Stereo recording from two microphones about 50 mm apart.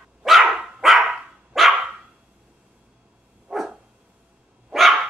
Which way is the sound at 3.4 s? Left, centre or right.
Centre.